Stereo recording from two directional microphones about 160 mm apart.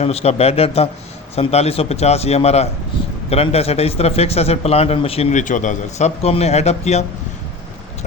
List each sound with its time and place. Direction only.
0.0 s a man's voice: 40° left (ahead or behind)